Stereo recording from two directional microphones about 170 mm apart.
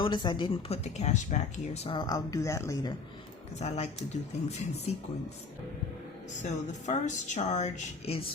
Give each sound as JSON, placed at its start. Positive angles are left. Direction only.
{"t": 0.0, "sound": "speech", "side_deg": 25}
{"t": 0.9, "sound": "speech", "side_deg": 45}
{"t": 2.0, "sound": "speech", "side_deg": 20}
{"t": 3.5, "sound": "speech", "side_deg": 40}
{"t": 6.4, "sound": "speech", "side_deg": 45}